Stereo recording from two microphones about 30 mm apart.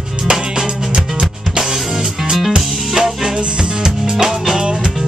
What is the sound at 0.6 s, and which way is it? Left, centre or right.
Music, right.